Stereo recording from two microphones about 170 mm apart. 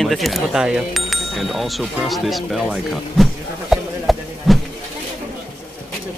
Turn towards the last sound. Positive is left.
turn(degrees=0)  # may be behind; listen again after turning